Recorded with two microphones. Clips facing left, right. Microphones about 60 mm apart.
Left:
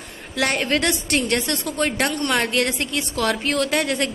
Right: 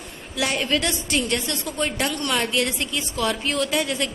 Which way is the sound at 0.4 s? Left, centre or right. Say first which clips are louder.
Left 2 dB; left.